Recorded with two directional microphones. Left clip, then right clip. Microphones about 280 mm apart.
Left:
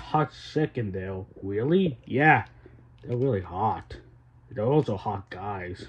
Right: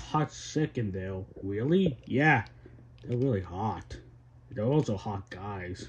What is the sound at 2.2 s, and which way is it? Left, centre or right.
Speech, centre.